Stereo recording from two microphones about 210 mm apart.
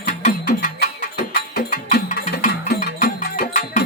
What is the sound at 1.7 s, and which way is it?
Music, 40° left (ahead or behind).